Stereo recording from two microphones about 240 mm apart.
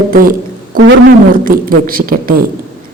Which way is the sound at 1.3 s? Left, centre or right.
Right.